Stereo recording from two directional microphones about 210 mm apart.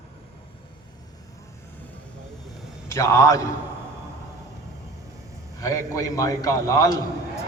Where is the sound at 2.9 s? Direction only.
15° left (ahead or behind).